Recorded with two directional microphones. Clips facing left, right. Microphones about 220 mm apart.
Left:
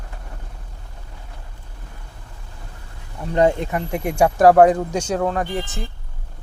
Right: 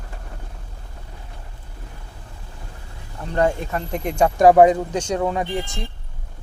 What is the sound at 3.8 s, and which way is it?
Speech, 10° left (ahead or behind).